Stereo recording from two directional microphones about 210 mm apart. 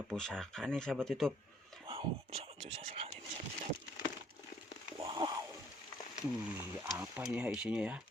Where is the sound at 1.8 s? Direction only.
25° right (ahead or behind).